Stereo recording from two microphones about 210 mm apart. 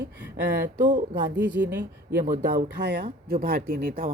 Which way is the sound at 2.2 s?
40° right (ahead or behind).